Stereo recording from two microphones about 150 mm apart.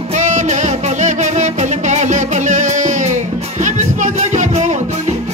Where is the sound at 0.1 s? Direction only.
55° right (ahead or behind).